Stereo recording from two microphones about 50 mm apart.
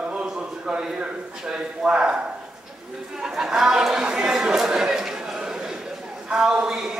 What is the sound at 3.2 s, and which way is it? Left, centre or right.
A man's voice, centre.